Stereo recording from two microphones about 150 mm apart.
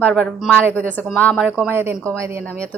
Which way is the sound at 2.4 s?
10° left (ahead or behind).